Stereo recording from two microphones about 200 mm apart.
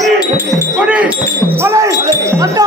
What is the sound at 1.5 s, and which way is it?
Wind chime, 15° right (ahead or behind).